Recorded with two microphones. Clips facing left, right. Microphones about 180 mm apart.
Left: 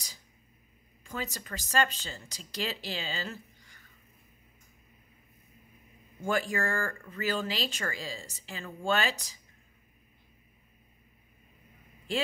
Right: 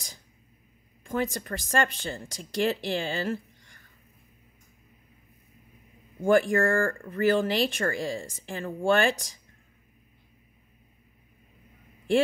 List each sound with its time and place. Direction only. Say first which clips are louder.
1.0 s speech: right 9 dB; 50° right (ahead or behind)
6.2 s speech: right 9 dB; 55° right (ahead or behind)